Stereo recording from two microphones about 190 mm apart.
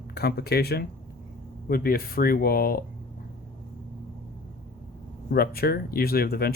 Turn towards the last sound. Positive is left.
turn(degrees=55)  # may be behind; listen again after turning